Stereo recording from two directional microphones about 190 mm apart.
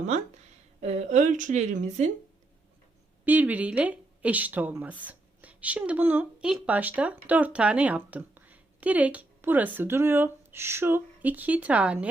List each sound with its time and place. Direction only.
0.0 s a woman's voice: 35° right (ahead or behind)
3.2 s speech: 10° right (ahead or behind)